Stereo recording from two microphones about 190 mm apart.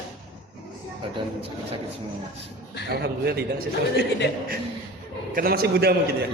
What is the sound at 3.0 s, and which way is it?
A man's voice, 55° right (ahead or behind).